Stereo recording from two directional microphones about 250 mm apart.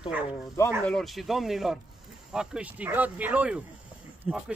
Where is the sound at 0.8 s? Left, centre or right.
Centre.